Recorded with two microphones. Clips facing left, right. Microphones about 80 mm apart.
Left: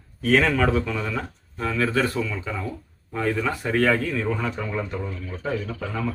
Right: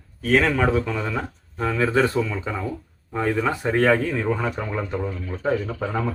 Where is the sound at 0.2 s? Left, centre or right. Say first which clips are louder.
Even; centre.